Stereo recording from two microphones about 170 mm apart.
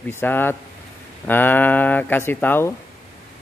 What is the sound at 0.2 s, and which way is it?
Speech, 10° left (ahead or behind).